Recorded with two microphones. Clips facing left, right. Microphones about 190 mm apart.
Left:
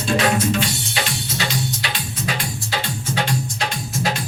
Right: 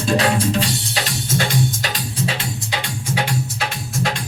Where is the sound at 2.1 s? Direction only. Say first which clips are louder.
Right 2 dB; 30° right (ahead or behind).